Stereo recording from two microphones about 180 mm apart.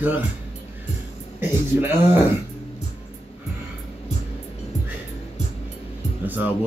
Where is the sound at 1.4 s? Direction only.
10° right (ahead or behind).